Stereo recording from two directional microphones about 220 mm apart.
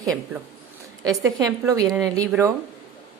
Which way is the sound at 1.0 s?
15° right (ahead or behind).